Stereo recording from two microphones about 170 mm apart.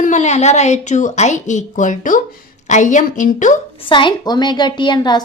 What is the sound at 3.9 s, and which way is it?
A woman's voice, 30° left (ahead or behind).